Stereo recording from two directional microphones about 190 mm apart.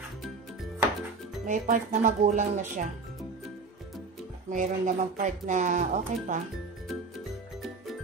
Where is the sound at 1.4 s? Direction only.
40° right (ahead or behind).